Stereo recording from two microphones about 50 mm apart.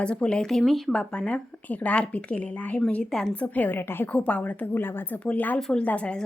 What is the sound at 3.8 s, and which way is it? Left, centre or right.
Speech, left.